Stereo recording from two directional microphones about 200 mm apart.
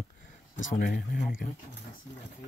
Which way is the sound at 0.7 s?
40° left (ahead or behind).